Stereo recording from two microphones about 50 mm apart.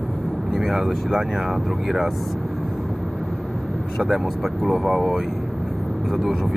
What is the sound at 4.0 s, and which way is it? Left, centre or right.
Speech, centre.